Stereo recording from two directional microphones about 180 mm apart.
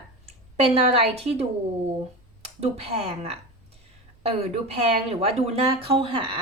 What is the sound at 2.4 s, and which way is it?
A woman's voice, 35° right (ahead or behind).